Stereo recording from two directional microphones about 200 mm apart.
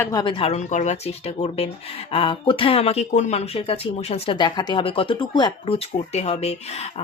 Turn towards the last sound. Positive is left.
turn(degrees=30)  # may be behind; listen again after turning